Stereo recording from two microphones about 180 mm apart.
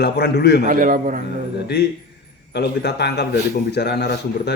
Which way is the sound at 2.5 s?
65° left (ahead or behind).